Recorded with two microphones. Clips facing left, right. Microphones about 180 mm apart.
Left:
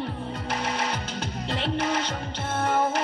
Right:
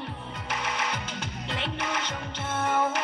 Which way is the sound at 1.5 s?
35° left (ahead or behind).